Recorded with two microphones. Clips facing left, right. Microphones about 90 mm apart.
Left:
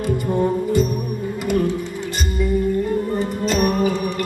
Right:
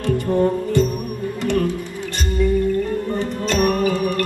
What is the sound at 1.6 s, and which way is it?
Music, 20° left (ahead or behind).